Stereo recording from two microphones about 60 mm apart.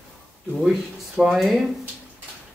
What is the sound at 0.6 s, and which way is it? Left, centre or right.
Speech, centre.